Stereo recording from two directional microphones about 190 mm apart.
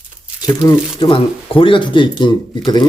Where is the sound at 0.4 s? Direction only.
20° left (ahead or behind).